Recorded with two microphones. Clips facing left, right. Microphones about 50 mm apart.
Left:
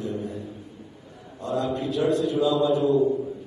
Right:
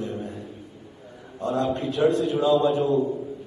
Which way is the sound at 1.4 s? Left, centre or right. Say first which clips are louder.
Right 2 dB; right.